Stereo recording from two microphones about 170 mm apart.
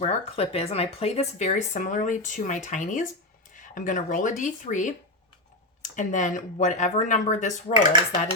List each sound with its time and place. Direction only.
0.0 s speech: 40° left (ahead or behind)